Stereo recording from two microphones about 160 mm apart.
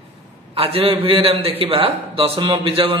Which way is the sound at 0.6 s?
35° right (ahead or behind).